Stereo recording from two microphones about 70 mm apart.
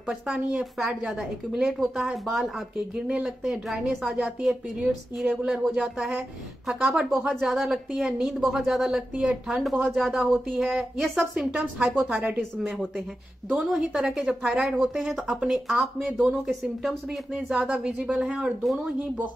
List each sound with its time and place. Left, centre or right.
0.0 s a woman's voice: centre
12.2 s a woman's voice: right
12.6 s a woman's voice: centre
18.6 s a woman's voice: centre